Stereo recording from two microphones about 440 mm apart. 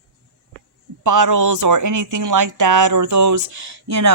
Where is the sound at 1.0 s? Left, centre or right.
Right.